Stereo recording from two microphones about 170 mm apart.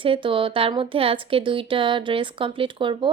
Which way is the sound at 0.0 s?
30° right (ahead or behind).